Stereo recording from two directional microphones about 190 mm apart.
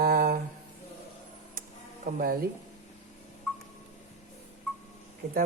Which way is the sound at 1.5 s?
50° right (ahead or behind).